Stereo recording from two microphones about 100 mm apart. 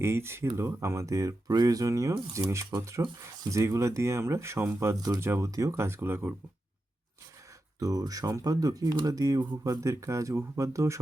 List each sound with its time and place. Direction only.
0.0 s speech: 25° right (ahead or behind)
4.9 s speech: 40° right (ahead or behind)
5.2 s speech: 25° right (ahead or behind)
7.8 s speech: 35° right (ahead or behind)